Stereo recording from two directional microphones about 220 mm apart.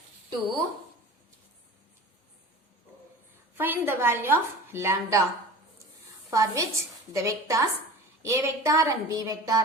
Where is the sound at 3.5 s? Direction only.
10° right (ahead or behind).